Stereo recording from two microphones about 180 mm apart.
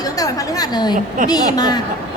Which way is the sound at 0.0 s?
20° left (ahead or behind).